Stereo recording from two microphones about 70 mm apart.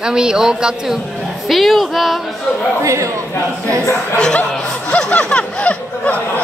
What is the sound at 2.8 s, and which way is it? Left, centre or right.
Speech, right.